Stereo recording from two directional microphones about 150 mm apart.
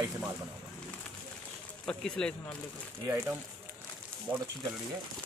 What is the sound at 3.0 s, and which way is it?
Speech, 20° right (ahead or behind).